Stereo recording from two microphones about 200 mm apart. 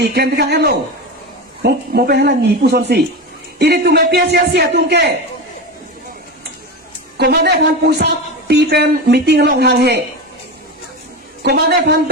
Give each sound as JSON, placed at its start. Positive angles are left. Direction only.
{"t": 0.0, "sound": "speech", "side_deg": -50}
{"t": 7.2, "sound": "speech", "side_deg": -55}
{"t": 11.4, "sound": "speech", "side_deg": -55}